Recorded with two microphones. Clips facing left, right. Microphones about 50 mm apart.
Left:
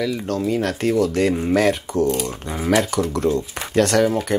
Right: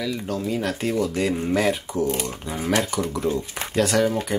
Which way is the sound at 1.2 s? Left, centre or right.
Centre.